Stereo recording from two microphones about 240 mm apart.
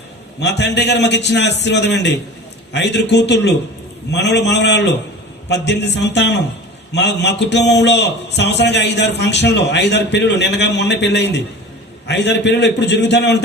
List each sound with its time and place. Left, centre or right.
0.3 s a man's voice: left